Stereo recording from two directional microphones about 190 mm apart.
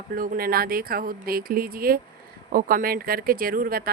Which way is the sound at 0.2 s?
50° right (ahead or behind).